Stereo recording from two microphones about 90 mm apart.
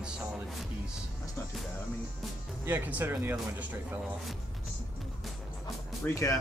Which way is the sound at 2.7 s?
20° right (ahead or behind).